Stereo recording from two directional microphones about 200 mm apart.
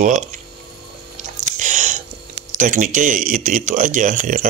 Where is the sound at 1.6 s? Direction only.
40° right (ahead or behind).